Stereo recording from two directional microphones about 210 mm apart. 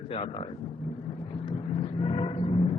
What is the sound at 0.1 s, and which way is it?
Speech, 30° left (ahead or behind).